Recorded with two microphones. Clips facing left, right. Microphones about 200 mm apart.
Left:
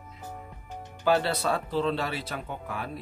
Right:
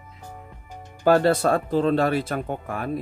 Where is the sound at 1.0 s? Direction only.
45° right (ahead or behind).